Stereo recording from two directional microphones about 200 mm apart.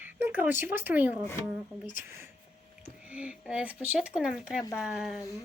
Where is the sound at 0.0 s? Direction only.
10° right (ahead or behind).